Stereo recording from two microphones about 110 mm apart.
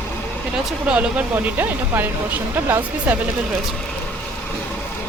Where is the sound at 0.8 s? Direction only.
10° right (ahead or behind).